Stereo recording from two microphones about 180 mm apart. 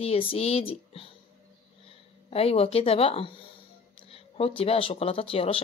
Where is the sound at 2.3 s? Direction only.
35° left (ahead or behind).